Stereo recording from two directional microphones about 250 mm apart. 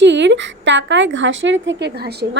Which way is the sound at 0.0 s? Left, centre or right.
Right.